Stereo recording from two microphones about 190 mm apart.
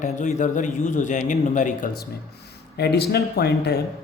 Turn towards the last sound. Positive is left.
turn(degrees=60)  # may be behind; listen again after turning